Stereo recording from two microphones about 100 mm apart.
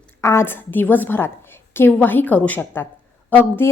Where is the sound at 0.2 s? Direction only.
30° left (ahead or behind).